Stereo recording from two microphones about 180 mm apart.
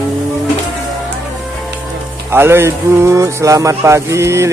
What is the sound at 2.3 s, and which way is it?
Speech, 15° right (ahead or behind).